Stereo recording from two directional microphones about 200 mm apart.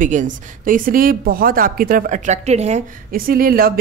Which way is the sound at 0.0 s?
40° right (ahead or behind).